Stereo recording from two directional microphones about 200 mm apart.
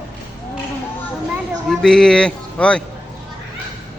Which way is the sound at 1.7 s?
Centre (ahead or behind).